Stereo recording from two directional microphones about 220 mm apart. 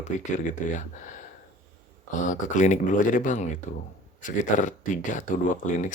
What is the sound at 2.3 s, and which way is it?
Speech, 35° left (ahead or behind).